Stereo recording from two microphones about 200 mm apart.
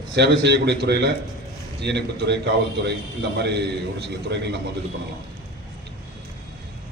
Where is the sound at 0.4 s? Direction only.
55° right (ahead or behind).